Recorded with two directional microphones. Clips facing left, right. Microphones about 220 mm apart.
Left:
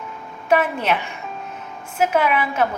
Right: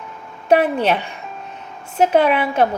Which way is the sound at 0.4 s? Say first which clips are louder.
Right 4 dB; 35° right (ahead or behind).